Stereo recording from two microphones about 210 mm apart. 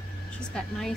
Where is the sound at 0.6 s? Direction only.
5° left (ahead or behind).